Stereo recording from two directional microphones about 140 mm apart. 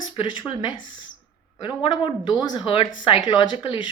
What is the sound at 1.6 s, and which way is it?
A woman's voice, 40° left (ahead or behind).